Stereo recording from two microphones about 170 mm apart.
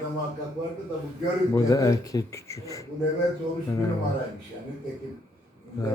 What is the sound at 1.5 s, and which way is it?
Speech, 20° left (ahead or behind).